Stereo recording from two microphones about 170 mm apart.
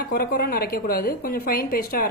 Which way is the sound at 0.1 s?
60° left (ahead or behind).